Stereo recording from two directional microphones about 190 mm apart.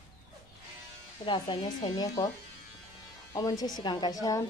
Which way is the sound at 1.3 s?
30° left (ahead or behind).